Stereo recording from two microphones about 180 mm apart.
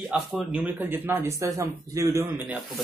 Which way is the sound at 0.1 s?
5° right (ahead or behind).